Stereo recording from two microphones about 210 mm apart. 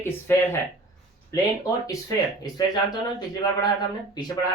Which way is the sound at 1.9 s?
15° left (ahead or behind).